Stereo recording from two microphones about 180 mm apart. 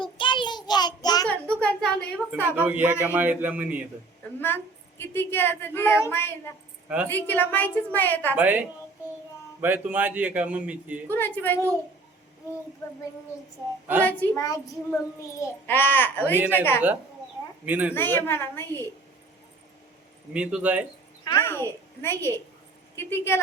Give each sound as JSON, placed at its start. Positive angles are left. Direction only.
{"t": 0.0, "sound": "child singing", "side_deg": 25}
{"t": 1.3, "sound": "a sound", "side_deg": 5}
{"t": 2.3, "sound": "speech", "side_deg": -10}
{"t": 4.4, "sound": "a woman's voice", "side_deg": 10}
{"t": 6.8, "sound": "a woman's voice", "side_deg": -10}
{"t": 7.1, "sound": "a woman's voice", "side_deg": 10}
{"t": 8.4, "sound": "speech", "side_deg": -10}
{"t": 11.1, "sound": "a woman's voice", "side_deg": 10}
{"t": 14.0, "sound": "a woman's voice", "side_deg": 10}
{"t": 16.3, "sound": "speech", "side_deg": -10}
{"t": 17.7, "sound": "speech", "side_deg": -10}
{"t": 17.9, "sound": "a woman's voice", "side_deg": 10}
{"t": 20.3, "sound": "speech", "side_deg": -5}
{"t": 21.2, "sound": "a woman's voice", "side_deg": 15}